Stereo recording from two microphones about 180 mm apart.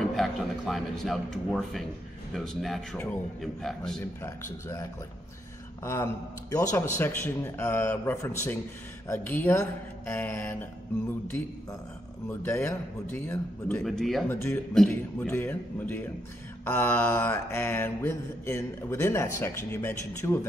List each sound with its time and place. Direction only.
0.0 s a man's voice: centre (ahead or behind)
4.0 s mantra: 15° left (ahead or behind)
5.9 s mantra: 15° left (ahead or behind)
14.3 s mantra: 15° left (ahead or behind)